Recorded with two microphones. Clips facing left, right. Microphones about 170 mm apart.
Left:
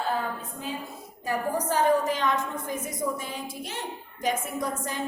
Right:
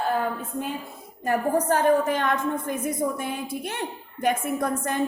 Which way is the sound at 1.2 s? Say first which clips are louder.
Right 5 dB; 55° right (ahead or behind).